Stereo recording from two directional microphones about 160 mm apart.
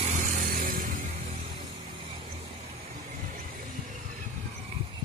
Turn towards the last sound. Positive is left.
turn(degrees=-55)  # may be behind; listen again after turning